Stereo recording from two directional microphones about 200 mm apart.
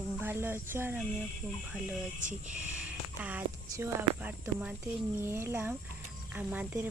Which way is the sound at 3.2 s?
10° right (ahead or behind).